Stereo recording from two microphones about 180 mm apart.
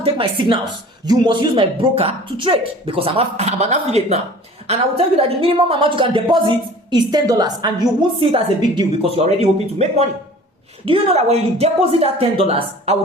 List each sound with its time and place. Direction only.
0.0 s a woman's voice: 30° right (ahead or behind)